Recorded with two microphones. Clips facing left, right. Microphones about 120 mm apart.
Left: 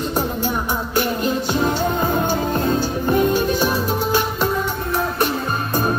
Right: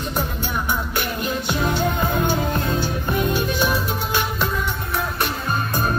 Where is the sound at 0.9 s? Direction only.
35° left (ahead or behind).